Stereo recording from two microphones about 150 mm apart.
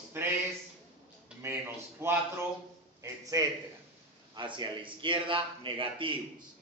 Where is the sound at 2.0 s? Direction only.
15° right (ahead or behind).